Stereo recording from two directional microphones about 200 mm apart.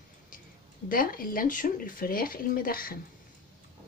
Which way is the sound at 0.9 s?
45° left (ahead or behind).